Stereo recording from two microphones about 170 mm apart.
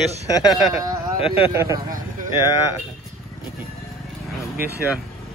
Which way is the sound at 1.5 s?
15° right (ahead or behind).